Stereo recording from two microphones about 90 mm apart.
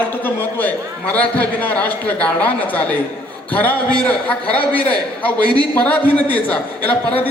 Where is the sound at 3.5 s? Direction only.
20° left (ahead or behind).